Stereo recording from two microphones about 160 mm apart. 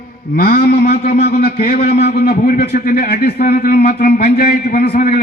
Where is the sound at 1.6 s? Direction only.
70° left (ahead or behind).